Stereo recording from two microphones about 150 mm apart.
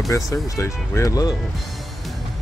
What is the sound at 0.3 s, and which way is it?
Speech, 20° left (ahead or behind).